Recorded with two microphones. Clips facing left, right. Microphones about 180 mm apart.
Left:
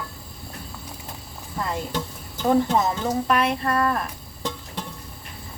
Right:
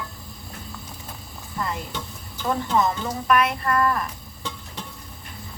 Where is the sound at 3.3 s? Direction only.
25° left (ahead or behind).